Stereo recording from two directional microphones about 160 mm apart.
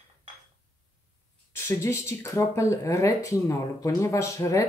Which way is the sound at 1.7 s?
20° left (ahead or behind).